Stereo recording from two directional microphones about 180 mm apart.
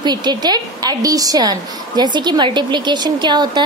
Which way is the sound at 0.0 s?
25° right (ahead or behind).